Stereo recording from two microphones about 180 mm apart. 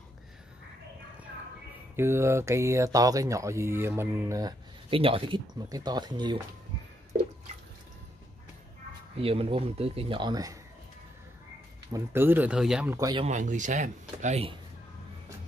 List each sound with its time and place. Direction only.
2.0 s speech: 15° right (ahead or behind)
9.1 s speech: 30° right (ahead or behind)
11.9 s speech: 10° right (ahead or behind)
12.9 s speech: 20° right (ahead or behind)
13.2 s speech: 45° right (ahead or behind)